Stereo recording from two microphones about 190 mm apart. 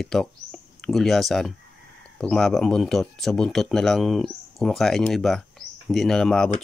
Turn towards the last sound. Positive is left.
turn(degrees=5)  # may be behind; listen again after turning